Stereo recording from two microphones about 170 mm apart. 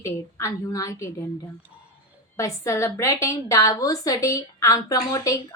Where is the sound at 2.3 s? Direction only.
15° left (ahead or behind).